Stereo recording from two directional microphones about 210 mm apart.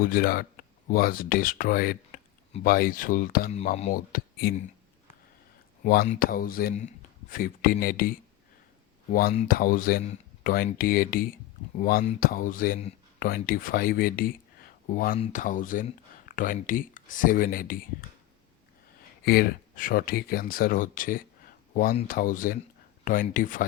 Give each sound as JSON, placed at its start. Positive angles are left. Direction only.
{"t": 0.0, "sound": "speech", "side_deg": 45}
{"t": 3.5, "sound": "speech", "side_deg": 30}
{"t": 5.8, "sound": "speech", "side_deg": 45}
{"t": 9.1, "sound": "speech", "side_deg": 40}
{"t": 19.2, "sound": "speech", "side_deg": 45}